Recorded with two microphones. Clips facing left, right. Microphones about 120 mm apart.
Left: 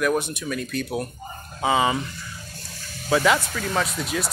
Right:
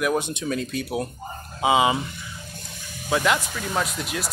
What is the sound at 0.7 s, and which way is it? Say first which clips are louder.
Speech: even; 15° right (ahead or behind).